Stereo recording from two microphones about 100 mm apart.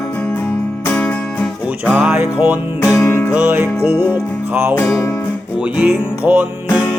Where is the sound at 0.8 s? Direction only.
15° left (ahead or behind).